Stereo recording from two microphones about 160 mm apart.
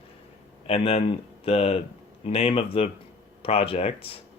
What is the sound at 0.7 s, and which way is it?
Speech, 40° left (ahead or behind).